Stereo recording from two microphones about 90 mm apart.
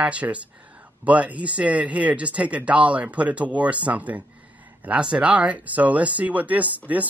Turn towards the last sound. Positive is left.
turn(degrees=-15)  # may be behind; listen again after turning